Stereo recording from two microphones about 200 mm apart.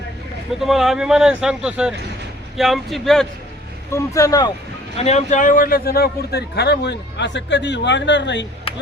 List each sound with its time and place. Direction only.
0.6 s speech: centre (ahead or behind)
3.9 s speech: 15° left (ahead or behind)
4.9 s a man's voice: 35° left (ahead or behind); by 8.4 s 60° left (ahead or behind)
8.7 s a sound: 25° left (ahead or behind)